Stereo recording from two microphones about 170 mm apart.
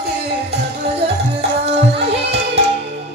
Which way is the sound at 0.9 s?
35° right (ahead or behind).